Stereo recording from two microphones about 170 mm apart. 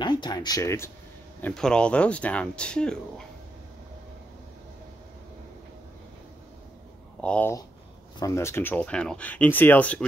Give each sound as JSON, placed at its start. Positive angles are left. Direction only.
{"t": 0.0, "sound": "speech", "side_deg": 25}
{"t": 1.4, "sound": "speech", "side_deg": 5}
{"t": 7.2, "sound": "speech", "side_deg": 5}